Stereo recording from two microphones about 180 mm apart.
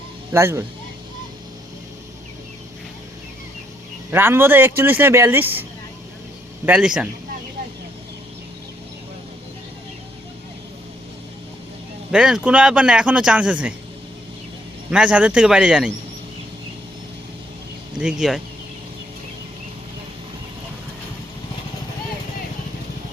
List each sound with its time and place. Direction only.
0.3 s speech: 15° right (ahead or behind)
4.1 s speech: 10° right (ahead or behind)
6.7 s speech: 5° right (ahead or behind)
12.1 s speech: 5° right (ahead or behind)
14.8 s speech: 5° right (ahead or behind)
18.0 s speech: centre (ahead or behind)